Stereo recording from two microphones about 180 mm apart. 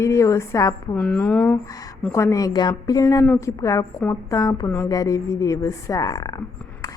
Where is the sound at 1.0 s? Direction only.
5° left (ahead or behind).